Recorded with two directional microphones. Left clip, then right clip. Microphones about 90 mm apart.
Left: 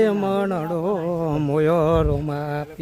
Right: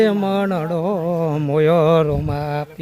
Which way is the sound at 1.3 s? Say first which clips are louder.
Right 1 dB; centre (ahead or behind).